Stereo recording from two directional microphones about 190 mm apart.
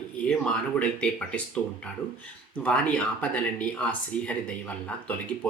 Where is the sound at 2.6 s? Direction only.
5° left (ahead or behind).